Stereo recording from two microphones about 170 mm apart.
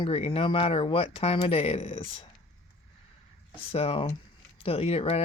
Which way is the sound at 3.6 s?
35° left (ahead or behind).